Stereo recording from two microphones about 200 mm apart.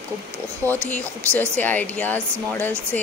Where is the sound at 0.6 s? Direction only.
15° right (ahead or behind).